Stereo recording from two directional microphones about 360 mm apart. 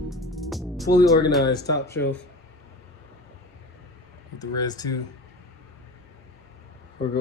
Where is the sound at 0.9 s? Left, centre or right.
Centre.